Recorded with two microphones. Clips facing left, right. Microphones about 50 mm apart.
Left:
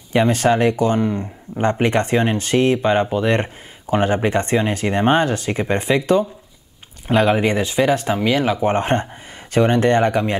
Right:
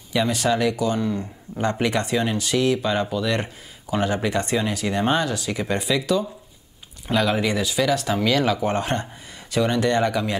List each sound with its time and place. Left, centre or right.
0.1 s speech: left
8.7 s speech: left